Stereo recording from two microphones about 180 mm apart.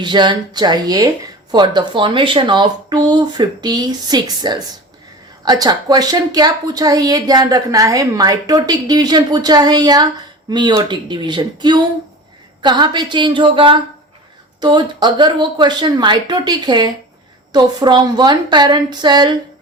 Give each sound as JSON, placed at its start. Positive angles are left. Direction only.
{"t": 0.0, "sound": "speech", "side_deg": -25}